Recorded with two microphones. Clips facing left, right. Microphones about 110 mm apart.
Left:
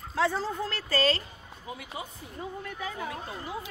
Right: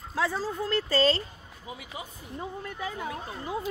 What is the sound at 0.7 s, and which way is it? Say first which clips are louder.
Speech: right 4 dB; 30° right (ahead or behind).